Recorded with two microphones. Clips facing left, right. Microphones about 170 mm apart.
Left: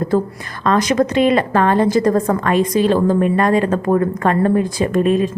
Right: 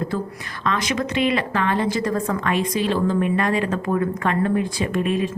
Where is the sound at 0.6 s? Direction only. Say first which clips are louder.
Left 8 dB; 45° left (ahead or behind).